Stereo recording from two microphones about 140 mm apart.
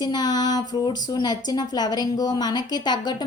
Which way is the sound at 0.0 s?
30° left (ahead or behind).